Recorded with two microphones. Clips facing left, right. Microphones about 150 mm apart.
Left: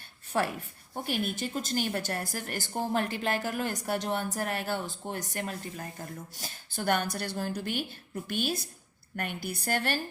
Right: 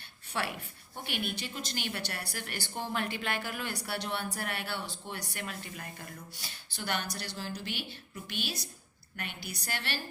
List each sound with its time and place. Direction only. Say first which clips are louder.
0.3 s a woman's voice: left 6 dB; 40° left (ahead or behind)